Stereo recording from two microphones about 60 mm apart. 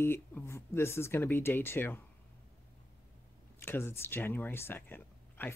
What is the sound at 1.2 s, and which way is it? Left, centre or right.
Speech, left.